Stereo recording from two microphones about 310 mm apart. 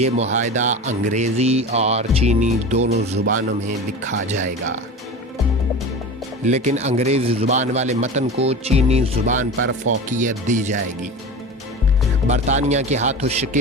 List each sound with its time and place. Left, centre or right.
0.0 s speech: right
4.3 s speech: right
6.4 s speech: right
12.3 s speech: right